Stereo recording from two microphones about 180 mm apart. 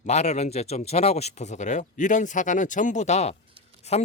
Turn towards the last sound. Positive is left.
turn(degrees=35)  # may be behind; listen again after turning